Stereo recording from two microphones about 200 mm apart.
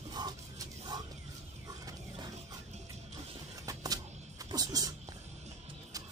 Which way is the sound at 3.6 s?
20° right (ahead or behind).